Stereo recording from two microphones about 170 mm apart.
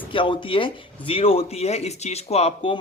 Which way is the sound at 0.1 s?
30° left (ahead or behind).